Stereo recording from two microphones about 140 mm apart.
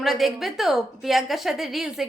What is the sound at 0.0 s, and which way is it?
A woman's voice, centre (ahead or behind).